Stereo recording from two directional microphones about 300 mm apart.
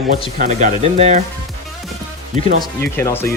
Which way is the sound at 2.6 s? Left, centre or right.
Centre.